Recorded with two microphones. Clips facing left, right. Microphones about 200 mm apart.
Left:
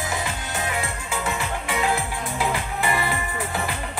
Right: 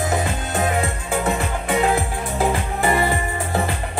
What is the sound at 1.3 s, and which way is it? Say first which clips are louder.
Music: right 6 dB; 55° right (ahead or behind).